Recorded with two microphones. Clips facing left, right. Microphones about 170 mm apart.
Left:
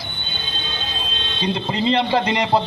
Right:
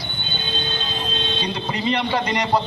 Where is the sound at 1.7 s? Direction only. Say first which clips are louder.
Left 4 dB; 30° left (ahead or behind).